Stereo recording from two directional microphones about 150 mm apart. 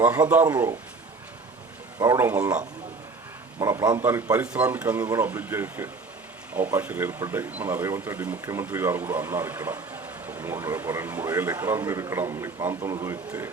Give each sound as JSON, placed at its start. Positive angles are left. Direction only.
{"t": 0.0, "sound": "speech", "side_deg": -10}
{"t": 2.0, "sound": "a man's voice", "side_deg": -20}
{"t": 3.6, "sound": "a man's voice", "side_deg": -20}